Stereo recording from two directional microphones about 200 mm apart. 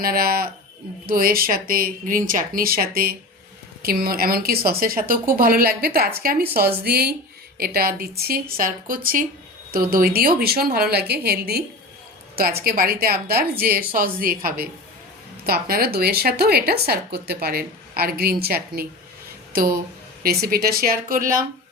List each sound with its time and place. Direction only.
0.0 s a woman's voice: 45° right (ahead or behind)